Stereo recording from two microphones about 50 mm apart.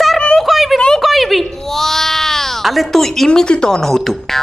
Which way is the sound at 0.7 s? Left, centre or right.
Centre.